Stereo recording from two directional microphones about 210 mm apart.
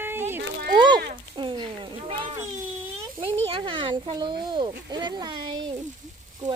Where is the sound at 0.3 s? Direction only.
50° right (ahead or behind).